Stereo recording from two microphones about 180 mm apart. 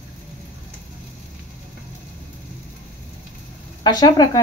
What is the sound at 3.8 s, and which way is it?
Speech, 20° left (ahead or behind).